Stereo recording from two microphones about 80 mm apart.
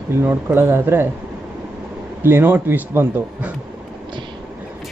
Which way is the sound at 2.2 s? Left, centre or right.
Right.